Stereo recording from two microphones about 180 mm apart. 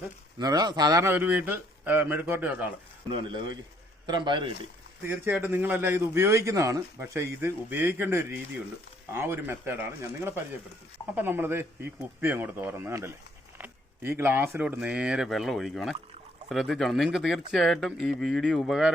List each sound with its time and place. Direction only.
0.3 s a man's voice: 20° right (ahead or behind)
4.0 s a man's voice: 25° right (ahead or behind)
5.0 s a man's voice: 10° right (ahead or behind)